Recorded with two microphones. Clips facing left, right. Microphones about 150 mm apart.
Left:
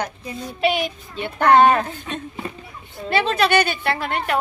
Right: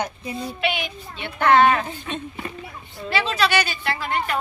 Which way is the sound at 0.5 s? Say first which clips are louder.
Left 9 dB; 40° left (ahead or behind).